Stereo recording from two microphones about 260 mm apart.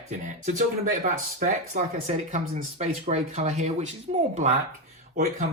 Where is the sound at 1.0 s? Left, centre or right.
Right.